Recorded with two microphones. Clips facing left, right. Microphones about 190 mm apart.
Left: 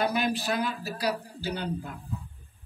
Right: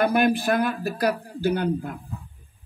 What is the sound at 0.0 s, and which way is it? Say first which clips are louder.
A man's voice: right 7 dB; 55° right (ahead or behind).